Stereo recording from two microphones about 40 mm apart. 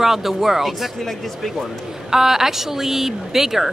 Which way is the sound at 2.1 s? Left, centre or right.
Centre.